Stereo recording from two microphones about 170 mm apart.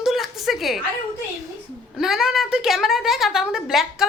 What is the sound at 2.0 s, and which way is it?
A woman's voice, 5° right (ahead or behind).